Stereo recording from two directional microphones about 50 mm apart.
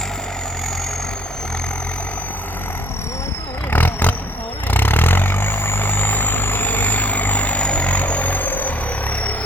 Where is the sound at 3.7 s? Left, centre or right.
Left.